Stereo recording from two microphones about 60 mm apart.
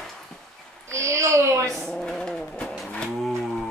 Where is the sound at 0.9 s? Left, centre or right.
Right.